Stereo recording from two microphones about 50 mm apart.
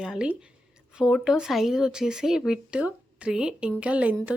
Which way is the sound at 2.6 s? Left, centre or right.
Right.